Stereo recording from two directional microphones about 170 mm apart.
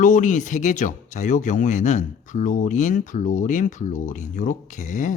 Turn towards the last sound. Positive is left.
turn(degrees=50)  # may be behind; listen again after turning